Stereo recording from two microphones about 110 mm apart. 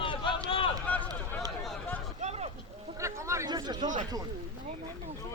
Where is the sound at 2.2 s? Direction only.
70° right (ahead or behind).